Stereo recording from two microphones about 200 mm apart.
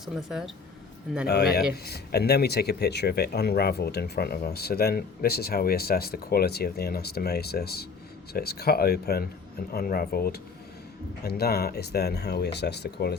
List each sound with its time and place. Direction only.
0.0 s speech: centre (ahead or behind)
1.3 s speech: 50° left (ahead or behind)